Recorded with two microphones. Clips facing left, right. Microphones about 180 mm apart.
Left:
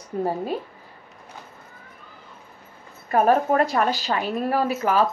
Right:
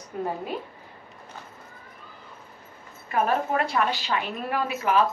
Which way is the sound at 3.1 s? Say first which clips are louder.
Left 6 dB; 40° left (ahead or behind).